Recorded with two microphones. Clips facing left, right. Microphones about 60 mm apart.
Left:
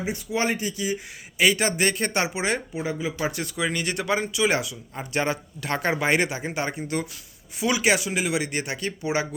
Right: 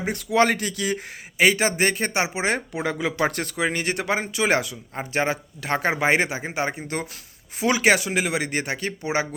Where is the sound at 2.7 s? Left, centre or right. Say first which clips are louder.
Right 3 dB; right.